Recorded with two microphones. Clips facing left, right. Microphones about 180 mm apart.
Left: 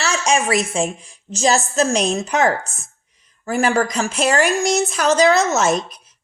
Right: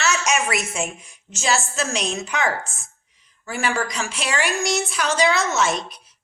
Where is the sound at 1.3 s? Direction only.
35° left (ahead or behind).